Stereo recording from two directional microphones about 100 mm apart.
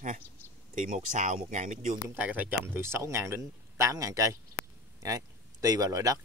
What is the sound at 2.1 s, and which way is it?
Speech, 15° right (ahead or behind).